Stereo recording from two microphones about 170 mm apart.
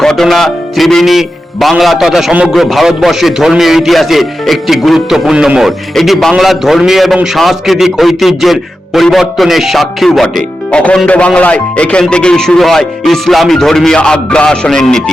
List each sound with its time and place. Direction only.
0.0 s a man's voice: centre (ahead or behind)